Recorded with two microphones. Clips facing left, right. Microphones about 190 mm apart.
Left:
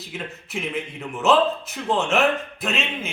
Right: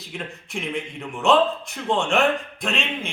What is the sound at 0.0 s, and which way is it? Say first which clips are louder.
A man's voice: even; centre (ahead or behind).